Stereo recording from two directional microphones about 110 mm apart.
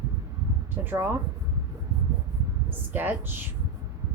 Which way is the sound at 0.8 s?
30° right (ahead or behind).